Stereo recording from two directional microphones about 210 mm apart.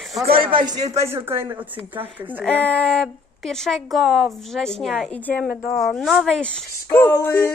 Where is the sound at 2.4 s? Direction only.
5° left (ahead or behind).